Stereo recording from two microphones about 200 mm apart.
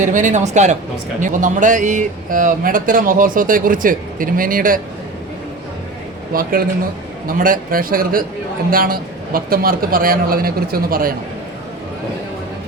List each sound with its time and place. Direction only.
0.0 s speech: 40° right (ahead or behind)
6.3 s speech: 45° right (ahead or behind)